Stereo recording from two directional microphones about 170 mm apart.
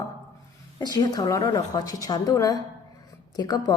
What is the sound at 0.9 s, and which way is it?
A woman's voice, 25° left (ahead or behind).